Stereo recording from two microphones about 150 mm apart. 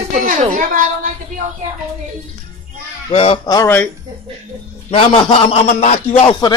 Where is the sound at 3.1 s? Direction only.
35° left (ahead or behind).